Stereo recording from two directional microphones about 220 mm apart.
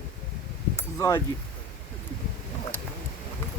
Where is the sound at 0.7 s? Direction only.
15° left (ahead or behind).